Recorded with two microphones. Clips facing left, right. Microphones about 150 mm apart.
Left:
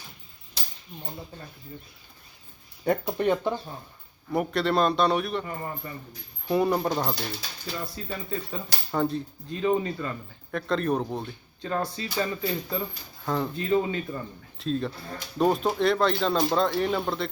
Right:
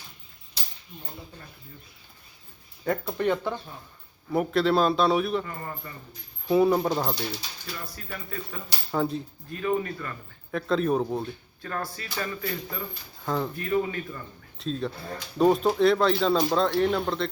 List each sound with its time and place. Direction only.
2.8 s speech: 15° left (ahead or behind)
4.3 s a man's voice: centre (ahead or behind)
5.5 s speech: 20° left (ahead or behind)
6.5 s a man's voice: centre (ahead or behind)
7.9 s speech: 25° left (ahead or behind)
8.9 s a man's voice: centre (ahead or behind)
9.5 s speech: 20° left (ahead or behind)
10.5 s a man's voice: centre (ahead or behind)
11.2 s speech: 20° left (ahead or behind)
13.2 s a man's voice: centre (ahead or behind)
13.6 s speech: 25° left (ahead or behind)
14.6 s a man's voice: centre (ahead or behind)